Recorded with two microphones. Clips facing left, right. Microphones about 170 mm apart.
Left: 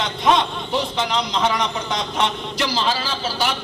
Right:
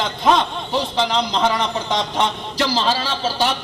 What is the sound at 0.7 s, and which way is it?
A man's voice, 30° right (ahead or behind).